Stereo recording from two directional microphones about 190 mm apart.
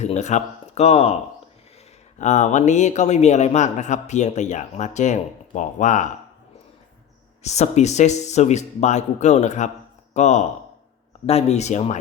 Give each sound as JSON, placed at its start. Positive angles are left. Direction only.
{"t": 0.0, "sound": "a man's voice", "side_deg": 35}
{"t": 7.4, "sound": "a man's voice", "side_deg": 35}